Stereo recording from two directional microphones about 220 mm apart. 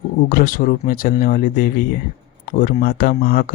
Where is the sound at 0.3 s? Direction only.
40° left (ahead or behind).